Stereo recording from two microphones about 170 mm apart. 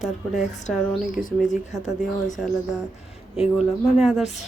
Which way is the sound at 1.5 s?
45° left (ahead or behind).